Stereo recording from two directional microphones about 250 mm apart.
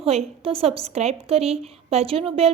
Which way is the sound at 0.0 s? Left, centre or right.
Right.